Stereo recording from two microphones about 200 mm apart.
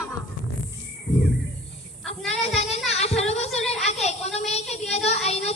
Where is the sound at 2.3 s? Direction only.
30° left (ahead or behind).